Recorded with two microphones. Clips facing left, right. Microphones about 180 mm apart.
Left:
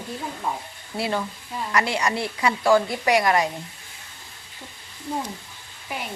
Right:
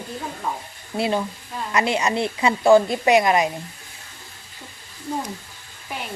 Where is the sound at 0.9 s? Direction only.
20° right (ahead or behind).